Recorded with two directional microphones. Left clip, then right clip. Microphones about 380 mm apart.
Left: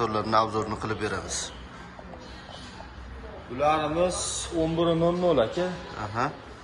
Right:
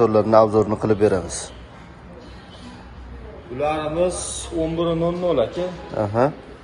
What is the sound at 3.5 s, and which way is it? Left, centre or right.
A man's voice, left.